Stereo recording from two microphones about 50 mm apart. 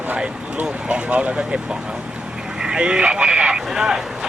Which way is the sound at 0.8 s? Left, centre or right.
Right.